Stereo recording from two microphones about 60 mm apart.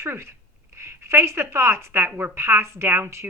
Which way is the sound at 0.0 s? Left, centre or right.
Right.